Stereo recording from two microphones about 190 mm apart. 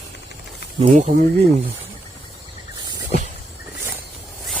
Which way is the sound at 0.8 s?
40° right (ahead or behind).